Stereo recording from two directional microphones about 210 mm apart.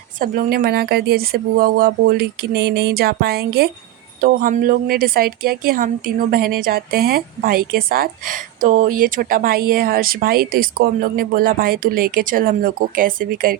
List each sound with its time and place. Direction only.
0.2 s a woman's voice: 45° right (ahead or behind)